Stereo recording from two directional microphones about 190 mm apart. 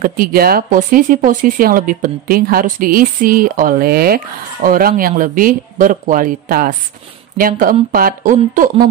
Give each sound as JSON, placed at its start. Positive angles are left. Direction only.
{"t": 0.0, "sound": "speech", "side_deg": -50}